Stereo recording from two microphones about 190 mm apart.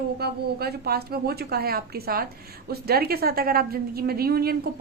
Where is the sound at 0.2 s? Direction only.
55° right (ahead or behind).